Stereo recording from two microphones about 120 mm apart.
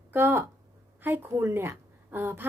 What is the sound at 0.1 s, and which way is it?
A woman's voice, 20° right (ahead or behind).